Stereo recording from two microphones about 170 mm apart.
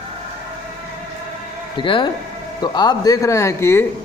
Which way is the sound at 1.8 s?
30° left (ahead or behind).